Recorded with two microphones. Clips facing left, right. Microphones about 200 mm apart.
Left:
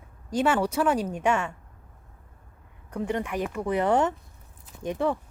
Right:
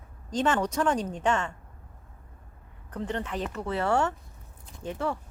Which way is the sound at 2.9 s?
10° left (ahead or behind).